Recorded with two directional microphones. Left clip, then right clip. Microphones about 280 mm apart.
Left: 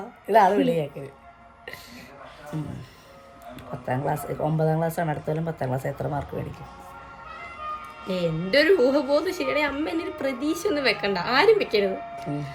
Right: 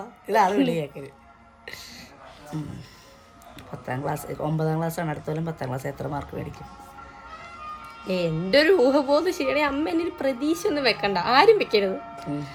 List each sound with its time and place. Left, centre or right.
0.3 s speech: centre
3.5 s speech: centre
8.0 s a woman's voice: centre